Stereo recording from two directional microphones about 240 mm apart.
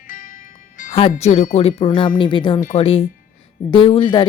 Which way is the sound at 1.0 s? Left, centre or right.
Left.